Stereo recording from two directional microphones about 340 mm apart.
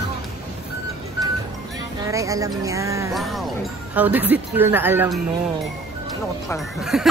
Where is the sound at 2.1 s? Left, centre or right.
Centre.